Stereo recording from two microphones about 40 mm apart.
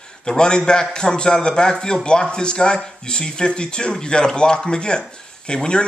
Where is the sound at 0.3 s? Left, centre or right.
Centre.